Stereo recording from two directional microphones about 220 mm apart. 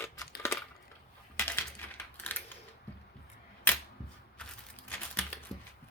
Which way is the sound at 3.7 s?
10° left (ahead or behind).